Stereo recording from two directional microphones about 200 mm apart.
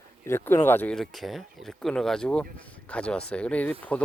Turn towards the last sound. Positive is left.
turn(degrees=5)  # may be behind; listen again after turning